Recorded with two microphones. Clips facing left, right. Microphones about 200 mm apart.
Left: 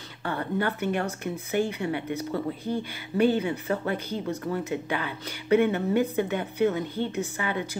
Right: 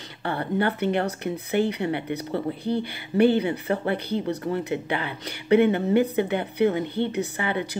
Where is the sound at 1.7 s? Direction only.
60° right (ahead or behind).